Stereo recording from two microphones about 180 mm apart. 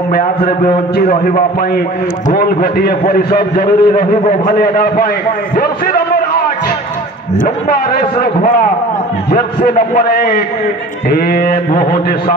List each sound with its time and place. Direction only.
0.1 s a man's voice: 55° left (ahead or behind)